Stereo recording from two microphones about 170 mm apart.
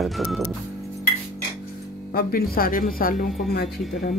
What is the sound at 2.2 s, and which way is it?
Speech, 60° left (ahead or behind).